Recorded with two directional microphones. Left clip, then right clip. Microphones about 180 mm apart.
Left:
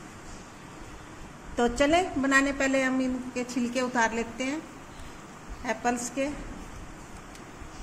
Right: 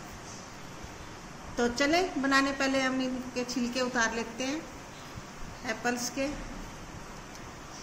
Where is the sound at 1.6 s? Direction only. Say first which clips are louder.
Left 3 dB; 45° left (ahead or behind).